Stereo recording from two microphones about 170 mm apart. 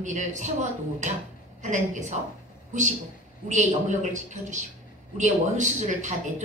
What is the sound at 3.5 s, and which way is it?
Speech, 45° right (ahead or behind).